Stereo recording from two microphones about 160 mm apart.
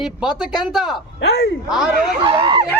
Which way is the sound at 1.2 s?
90° left.